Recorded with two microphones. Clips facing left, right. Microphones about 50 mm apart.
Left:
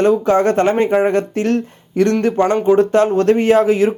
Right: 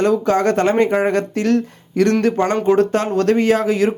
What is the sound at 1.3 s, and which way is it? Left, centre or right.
Speech, left.